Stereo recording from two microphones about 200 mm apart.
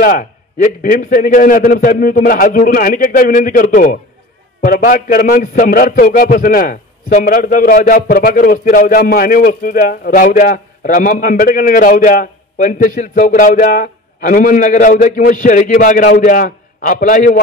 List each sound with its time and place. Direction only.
0.0 s a man's voice: 45° left (ahead or behind)